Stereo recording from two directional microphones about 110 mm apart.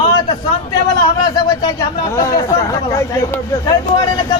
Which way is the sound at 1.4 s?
35° left (ahead or behind).